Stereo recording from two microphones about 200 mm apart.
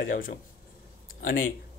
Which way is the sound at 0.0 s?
45° left (ahead or behind).